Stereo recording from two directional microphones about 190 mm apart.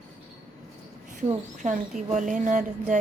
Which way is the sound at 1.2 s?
40° right (ahead or behind).